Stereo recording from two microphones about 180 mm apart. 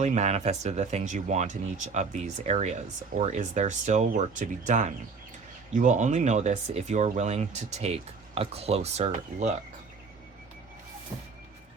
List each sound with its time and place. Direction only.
0.0 s speech: 40° right (ahead or behind)